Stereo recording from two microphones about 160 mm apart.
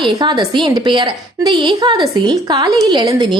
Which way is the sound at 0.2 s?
25° right (ahead or behind).